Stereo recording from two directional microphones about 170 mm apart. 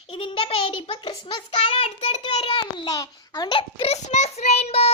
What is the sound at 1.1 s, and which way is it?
Child singing, 25° left (ahead or behind).